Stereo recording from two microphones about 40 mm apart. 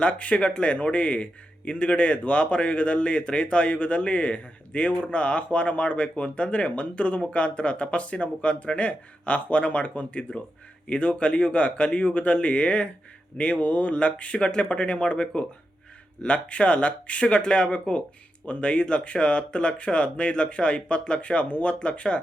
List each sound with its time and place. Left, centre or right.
0.0 s a man's voice: left